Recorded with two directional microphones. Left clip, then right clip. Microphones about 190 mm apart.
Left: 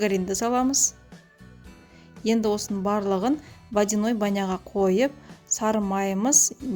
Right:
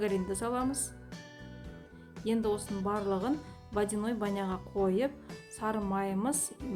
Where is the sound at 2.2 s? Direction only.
45° left (ahead or behind).